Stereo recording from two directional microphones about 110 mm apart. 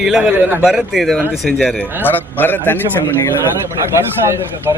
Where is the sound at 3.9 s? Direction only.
25° right (ahead or behind).